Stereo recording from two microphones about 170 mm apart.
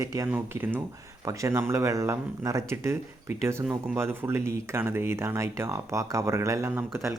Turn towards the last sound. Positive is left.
turn(degrees=-15)  # may be behind; listen again after turning